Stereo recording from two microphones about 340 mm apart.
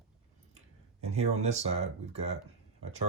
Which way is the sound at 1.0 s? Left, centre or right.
Centre.